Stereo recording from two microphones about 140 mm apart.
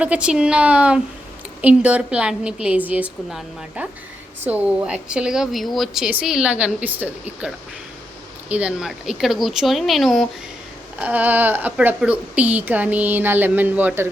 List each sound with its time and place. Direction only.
0.0 s a woman's voice: 10° right (ahead or behind)
11.0 s a woman's voice: 10° right (ahead or behind)